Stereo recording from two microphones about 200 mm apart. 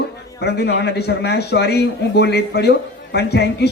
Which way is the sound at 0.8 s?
55° left (ahead or behind).